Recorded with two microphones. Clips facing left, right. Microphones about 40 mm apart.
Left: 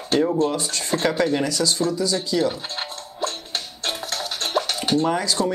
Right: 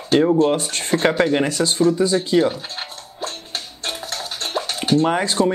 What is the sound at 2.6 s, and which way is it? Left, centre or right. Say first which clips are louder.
Music: left 1 dB; right.